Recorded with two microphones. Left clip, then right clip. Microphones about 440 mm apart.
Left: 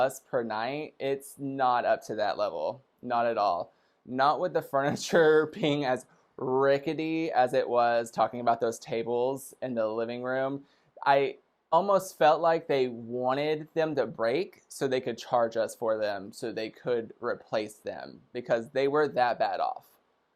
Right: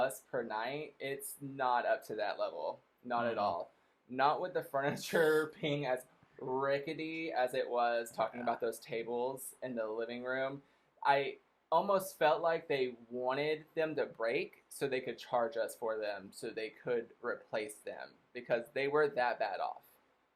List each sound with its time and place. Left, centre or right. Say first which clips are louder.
0.0 s speech: left 8 dB; left
6.4 s speech: left 10 dB; left